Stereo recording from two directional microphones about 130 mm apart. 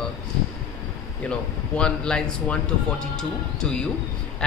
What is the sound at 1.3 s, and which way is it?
Speech, 5° left (ahead or behind).